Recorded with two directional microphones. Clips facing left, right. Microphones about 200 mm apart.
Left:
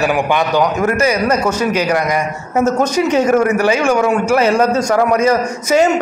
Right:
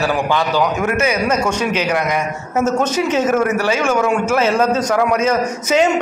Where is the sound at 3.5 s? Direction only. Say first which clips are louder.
Left 3 dB; 15° left (ahead or behind).